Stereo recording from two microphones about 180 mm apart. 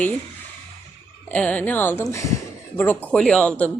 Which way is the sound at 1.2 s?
5° left (ahead or behind).